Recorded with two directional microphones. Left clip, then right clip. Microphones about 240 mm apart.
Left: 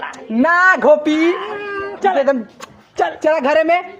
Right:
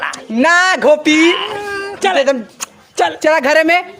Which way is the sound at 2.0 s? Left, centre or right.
Right.